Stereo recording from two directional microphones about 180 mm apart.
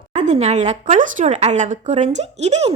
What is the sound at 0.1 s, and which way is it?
Speech, 40° right (ahead or behind).